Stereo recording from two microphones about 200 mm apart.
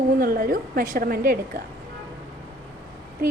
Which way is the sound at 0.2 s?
45° right (ahead or behind).